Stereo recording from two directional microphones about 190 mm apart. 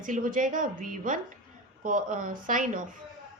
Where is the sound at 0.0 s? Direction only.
45° right (ahead or behind).